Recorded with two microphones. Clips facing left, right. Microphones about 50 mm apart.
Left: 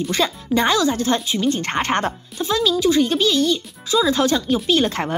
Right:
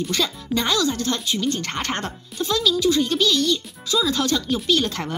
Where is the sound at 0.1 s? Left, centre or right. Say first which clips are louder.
Left 4 dB; left.